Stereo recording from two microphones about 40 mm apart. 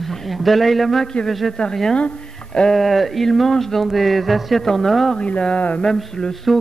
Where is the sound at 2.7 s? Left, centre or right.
Centre.